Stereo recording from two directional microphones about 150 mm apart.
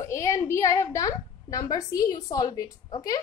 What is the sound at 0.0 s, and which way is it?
A woman's voice, 20° left (ahead or behind).